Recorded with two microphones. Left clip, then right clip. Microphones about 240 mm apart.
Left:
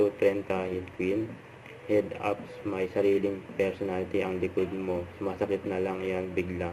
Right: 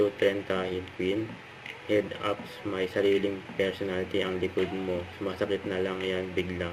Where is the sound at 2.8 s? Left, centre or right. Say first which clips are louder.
Even; centre.